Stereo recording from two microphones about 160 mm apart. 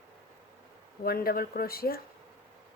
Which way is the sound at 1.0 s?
70° left (ahead or behind).